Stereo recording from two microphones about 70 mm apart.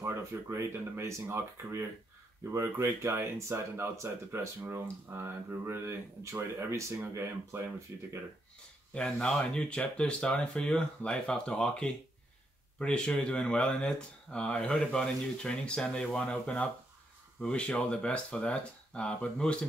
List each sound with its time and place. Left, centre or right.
0.0 s speech: right
7.9 s speech: right
8.9 s speech: centre